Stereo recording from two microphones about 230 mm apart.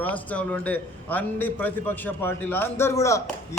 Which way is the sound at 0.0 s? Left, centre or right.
Centre.